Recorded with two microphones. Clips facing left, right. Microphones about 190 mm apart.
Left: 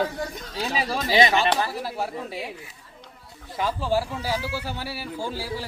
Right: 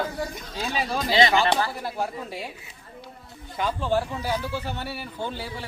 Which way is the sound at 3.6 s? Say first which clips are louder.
Even; 5° left (ahead or behind).